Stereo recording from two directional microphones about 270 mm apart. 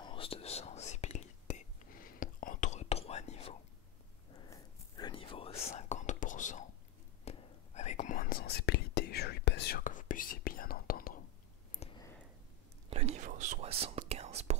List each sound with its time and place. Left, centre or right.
0.0 s whispering: centre
11.8 s a sound: left
12.9 s whispering: right